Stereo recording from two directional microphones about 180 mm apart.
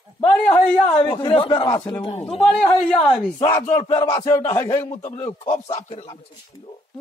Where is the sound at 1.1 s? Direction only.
25° left (ahead or behind).